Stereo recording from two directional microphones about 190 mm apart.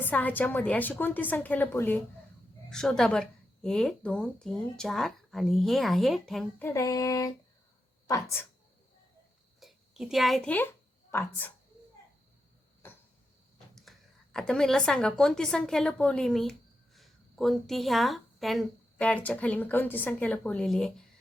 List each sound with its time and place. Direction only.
0.0 s a woman's voice: 10° left (ahead or behind)
6.7 s a woman's voice: 15° left (ahead or behind)
9.6 s a sound: centre (ahead or behind)
14.3 s a woman's voice: 5° left (ahead or behind)